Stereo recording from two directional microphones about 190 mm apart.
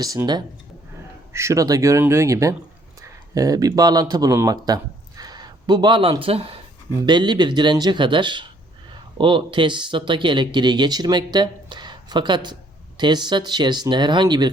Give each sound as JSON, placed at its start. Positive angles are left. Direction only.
{"t": 0.0, "sound": "speech", "side_deg": -20}